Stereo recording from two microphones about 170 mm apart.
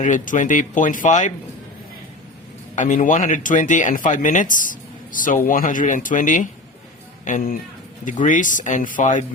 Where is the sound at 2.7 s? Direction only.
45° left (ahead or behind).